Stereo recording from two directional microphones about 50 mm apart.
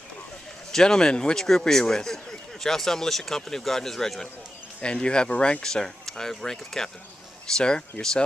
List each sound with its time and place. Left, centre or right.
0.7 s speech: centre
4.8 s speech: centre